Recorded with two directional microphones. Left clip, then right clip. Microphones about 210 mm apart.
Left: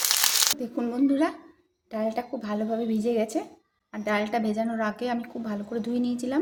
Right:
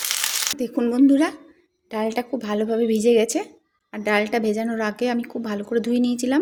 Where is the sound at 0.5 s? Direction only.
35° right (ahead or behind).